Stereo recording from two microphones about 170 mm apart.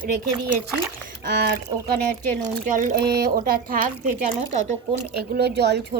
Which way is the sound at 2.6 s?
55° right (ahead or behind).